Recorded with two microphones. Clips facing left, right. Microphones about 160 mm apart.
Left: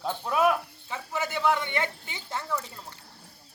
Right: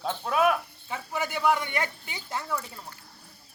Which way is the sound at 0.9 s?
15° right (ahead or behind).